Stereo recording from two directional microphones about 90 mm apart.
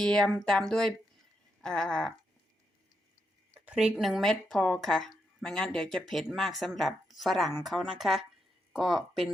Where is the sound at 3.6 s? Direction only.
5° right (ahead or behind).